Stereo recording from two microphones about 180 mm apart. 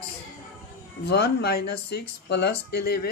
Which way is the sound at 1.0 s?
65° left (ahead or behind).